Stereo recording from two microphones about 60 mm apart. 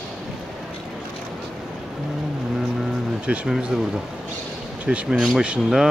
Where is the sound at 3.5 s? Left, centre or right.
Centre.